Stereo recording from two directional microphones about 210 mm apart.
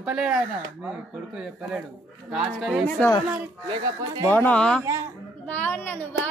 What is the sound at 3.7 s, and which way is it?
Speech, 20° right (ahead or behind).